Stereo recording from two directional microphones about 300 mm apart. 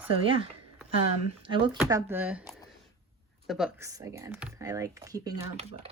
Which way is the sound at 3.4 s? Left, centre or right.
Centre.